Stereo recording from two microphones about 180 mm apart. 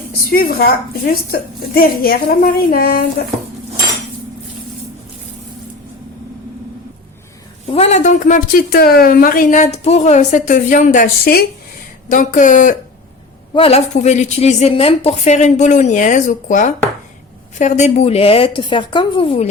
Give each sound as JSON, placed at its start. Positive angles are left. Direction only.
{"t": 0.1, "sound": "a woman's voice", "side_deg": 55}
{"t": 7.7, "sound": "a woman's voice", "side_deg": 35}
{"t": 13.5, "sound": "a woman's voice", "side_deg": 35}